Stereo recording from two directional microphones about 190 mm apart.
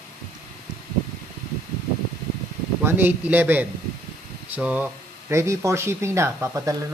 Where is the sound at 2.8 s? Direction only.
10° right (ahead or behind).